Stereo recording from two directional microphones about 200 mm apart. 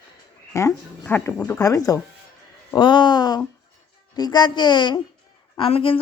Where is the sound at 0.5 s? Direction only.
10° left (ahead or behind).